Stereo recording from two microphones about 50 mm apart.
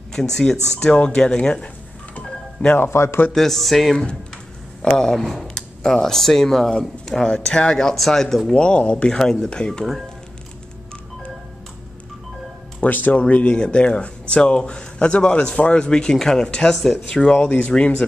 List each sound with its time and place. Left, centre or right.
0.1 s speech: centre
2.9 s speech: left
3.3 s music: centre
4.8 s speech: centre
7.9 s speech: centre
8.5 s speech: left
12.8 s speech: left
13.3 s speech: left
16.7 s music: centre
17.1 s speech: centre